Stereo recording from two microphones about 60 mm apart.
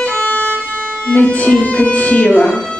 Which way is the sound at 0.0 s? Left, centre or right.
Left.